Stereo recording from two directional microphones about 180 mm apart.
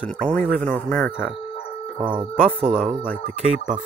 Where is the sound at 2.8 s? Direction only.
5° left (ahead or behind).